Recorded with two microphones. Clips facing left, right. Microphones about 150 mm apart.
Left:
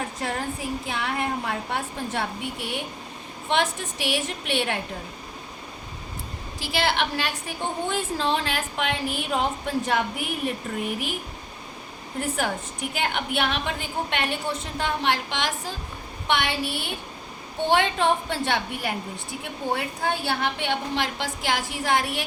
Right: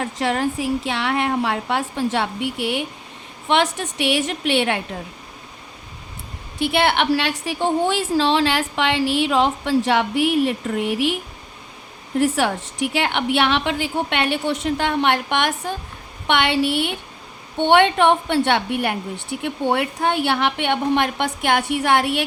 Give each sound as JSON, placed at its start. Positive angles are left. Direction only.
{"t": 0.2, "sound": "a woman's voice", "side_deg": -90}
{"t": 6.6, "sound": "a woman's voice", "side_deg": -65}
{"t": 12.2, "sound": "a woman's voice", "side_deg": -80}